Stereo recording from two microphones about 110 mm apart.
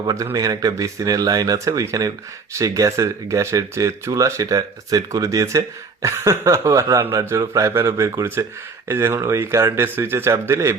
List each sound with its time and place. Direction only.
0.0 s speech: 30° right (ahead or behind)